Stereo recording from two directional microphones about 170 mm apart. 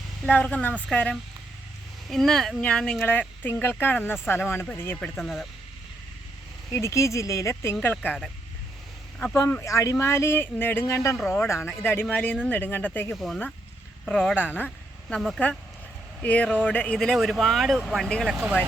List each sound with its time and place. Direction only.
0.3 s speech: 10° left (ahead or behind)
5.1 s speech: centre (ahead or behind)
6.7 s speech: 15° left (ahead or behind)
9.3 s speech: 15° left (ahead or behind); by 18.5 s 5° right (ahead or behind)